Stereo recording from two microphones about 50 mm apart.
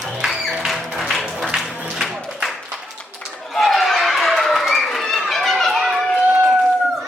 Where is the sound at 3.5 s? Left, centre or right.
Centre.